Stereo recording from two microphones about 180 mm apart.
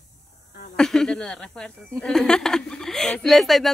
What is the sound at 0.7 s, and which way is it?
A woman's voice, 5° left (ahead or behind).